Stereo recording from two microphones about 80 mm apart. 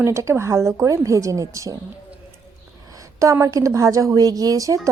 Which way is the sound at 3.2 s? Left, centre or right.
Right.